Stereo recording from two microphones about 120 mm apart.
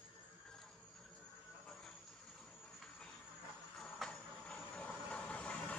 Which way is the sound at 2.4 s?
5° left (ahead or behind).